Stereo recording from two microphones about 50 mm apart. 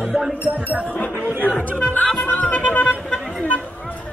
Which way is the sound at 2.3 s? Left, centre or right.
Left.